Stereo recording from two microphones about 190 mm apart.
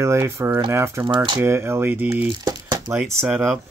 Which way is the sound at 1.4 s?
15° right (ahead or behind).